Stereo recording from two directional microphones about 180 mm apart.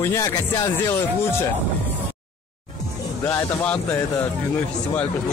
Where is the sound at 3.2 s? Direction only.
15° left (ahead or behind).